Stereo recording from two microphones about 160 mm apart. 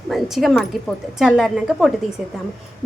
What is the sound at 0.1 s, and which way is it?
A woman's voice, centre (ahead or behind).